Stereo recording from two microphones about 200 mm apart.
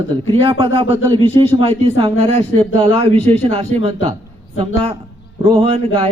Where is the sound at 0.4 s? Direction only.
25° right (ahead or behind).